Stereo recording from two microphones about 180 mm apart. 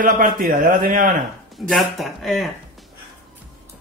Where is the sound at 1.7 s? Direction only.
Centre (ahead or behind).